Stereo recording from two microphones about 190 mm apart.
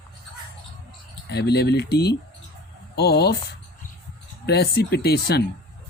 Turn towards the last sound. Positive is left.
turn(degrees=55)  # may be behind; listen again after turning